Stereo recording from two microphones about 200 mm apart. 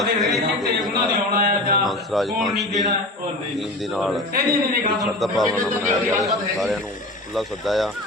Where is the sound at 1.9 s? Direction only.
Centre (ahead or behind).